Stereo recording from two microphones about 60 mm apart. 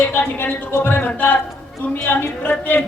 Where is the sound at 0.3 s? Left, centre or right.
Left.